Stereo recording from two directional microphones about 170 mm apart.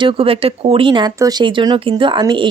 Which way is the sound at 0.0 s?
30° right (ahead or behind).